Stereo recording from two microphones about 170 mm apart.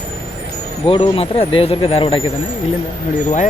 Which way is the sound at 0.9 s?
35° left (ahead or behind).